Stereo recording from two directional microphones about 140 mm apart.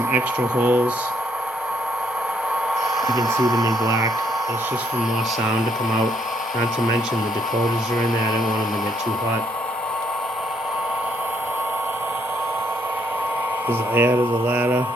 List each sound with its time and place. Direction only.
0.1 s speech: 10° right (ahead or behind)
3.0 s speech: centre (ahead or behind)
3.8 s speech: 25° right (ahead or behind)
7.5 s speech: centre (ahead or behind)
13.7 s speech: 15° right (ahead or behind)